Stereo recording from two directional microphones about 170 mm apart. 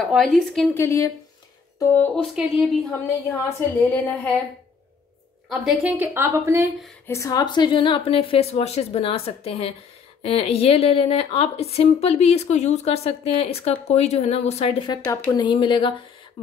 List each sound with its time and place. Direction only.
0.0 s speech: centre (ahead or behind)
0.7 s a woman's voice: 15° left (ahead or behind)
2.0 s speech: centre (ahead or behind)
3.3 s a woman's voice: 15° left (ahead or behind)
5.5 s a woman's voice: 5° right (ahead or behind)
7.1 s a woman's voice: 20° left (ahead or behind); by 15.0 s 35° left (ahead or behind)
15.0 s speech: 20° left (ahead or behind)